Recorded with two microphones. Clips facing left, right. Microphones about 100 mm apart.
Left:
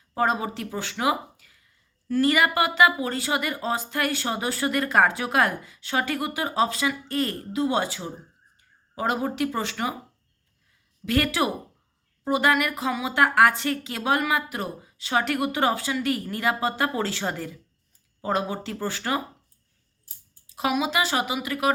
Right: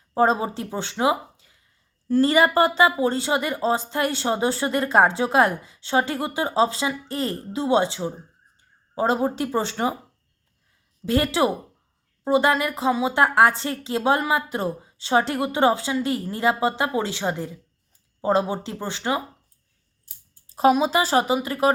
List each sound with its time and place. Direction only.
0.1 s speech: 30° right (ahead or behind)
11.0 s speech: 25° right (ahead or behind)
20.5 s speech: 35° right (ahead or behind)